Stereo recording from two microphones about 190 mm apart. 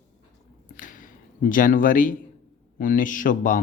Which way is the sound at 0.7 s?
45° left (ahead or behind).